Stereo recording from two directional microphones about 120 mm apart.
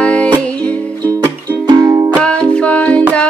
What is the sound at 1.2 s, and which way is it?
Music, 30° right (ahead or behind).